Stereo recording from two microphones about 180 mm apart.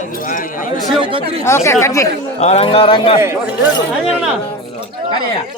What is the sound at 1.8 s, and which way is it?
Speech, 15° left (ahead or behind).